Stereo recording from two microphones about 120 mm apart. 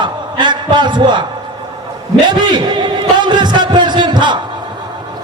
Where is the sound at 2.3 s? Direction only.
40° right (ahead or behind).